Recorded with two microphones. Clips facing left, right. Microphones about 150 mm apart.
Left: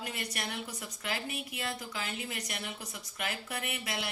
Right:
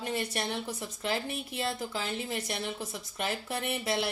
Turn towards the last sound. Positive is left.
turn(degrees=-30)  # may be behind; listen again after turning